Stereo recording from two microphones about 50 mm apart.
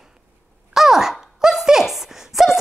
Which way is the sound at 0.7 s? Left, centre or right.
Centre.